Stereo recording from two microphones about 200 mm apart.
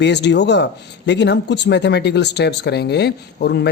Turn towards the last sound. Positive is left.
turn(degrees=55)  # may be behind; listen again after turning